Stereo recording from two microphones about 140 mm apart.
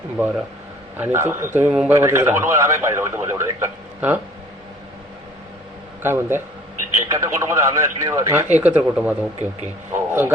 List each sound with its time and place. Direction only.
0.9 s a man's voice: 15° right (ahead or behind)
6.0 s a man's voice: 15° right (ahead or behind)